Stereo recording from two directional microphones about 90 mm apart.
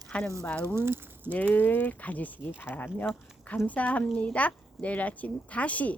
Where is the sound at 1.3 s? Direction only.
20° left (ahead or behind).